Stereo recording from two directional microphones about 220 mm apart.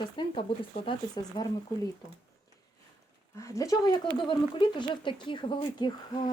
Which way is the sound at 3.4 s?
15° left (ahead or behind).